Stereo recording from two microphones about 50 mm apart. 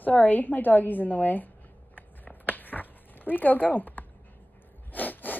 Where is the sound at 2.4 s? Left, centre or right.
Left.